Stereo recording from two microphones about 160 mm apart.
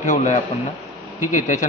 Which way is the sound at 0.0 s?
50° left (ahead or behind).